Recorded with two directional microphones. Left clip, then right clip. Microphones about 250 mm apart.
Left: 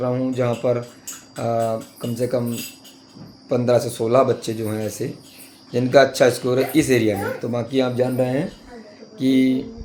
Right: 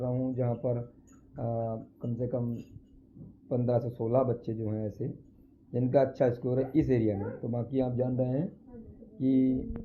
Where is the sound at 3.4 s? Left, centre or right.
Centre.